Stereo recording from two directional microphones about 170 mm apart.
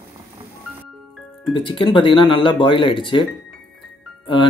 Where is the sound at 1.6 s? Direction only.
30° left (ahead or behind).